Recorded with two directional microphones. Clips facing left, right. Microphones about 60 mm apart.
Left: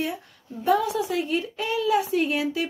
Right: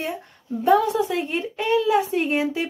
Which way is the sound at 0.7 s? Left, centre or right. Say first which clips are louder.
Right 4 dB; right.